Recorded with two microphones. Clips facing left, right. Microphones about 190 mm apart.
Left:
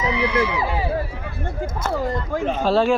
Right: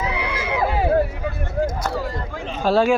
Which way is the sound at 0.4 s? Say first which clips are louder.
Right 3 dB; 55° right (ahead or behind).